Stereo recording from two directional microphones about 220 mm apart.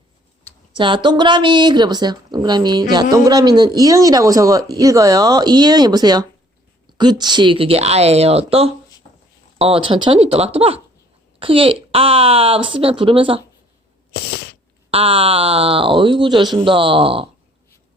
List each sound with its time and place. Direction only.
0.8 s a woman's voice: 20° right (ahead or behind)
14.1 s a sound: 50° left (ahead or behind)
14.8 s a woman's voice: 25° right (ahead or behind)